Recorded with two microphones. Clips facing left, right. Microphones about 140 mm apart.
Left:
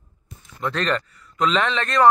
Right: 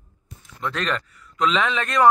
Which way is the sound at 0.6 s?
Centre (ahead or behind).